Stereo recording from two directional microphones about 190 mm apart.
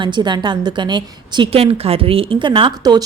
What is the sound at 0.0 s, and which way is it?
A woman's voice, 25° right (ahead or behind).